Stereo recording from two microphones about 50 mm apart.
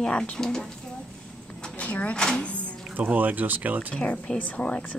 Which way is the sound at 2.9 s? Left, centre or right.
Right.